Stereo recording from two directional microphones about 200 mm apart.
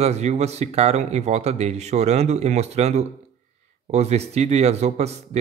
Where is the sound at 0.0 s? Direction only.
35° right (ahead or behind).